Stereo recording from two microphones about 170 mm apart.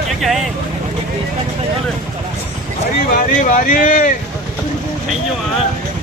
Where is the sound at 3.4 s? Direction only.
50° left (ahead or behind).